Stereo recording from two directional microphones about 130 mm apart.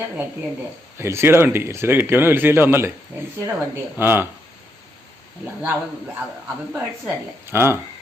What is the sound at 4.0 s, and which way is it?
Speech, 15° right (ahead or behind).